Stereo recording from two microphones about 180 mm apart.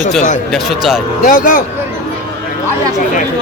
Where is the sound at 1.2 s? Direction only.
50° left (ahead or behind).